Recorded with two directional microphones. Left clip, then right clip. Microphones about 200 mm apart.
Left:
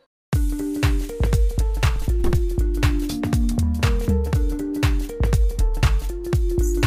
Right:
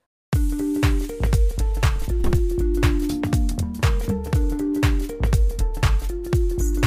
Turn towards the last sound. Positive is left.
turn(degrees=0)  # may be behind; listen again after turning